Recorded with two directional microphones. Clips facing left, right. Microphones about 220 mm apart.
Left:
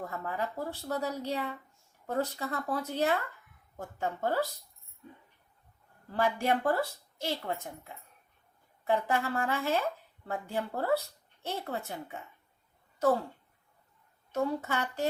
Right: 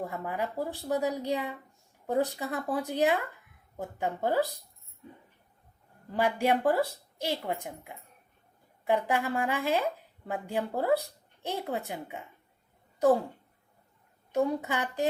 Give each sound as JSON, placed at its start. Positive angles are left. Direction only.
{"t": 0.0, "sound": "speech", "side_deg": -15}
{"t": 6.1, "sound": "a woman's voice", "side_deg": -15}
{"t": 14.3, "sound": "speech", "side_deg": -15}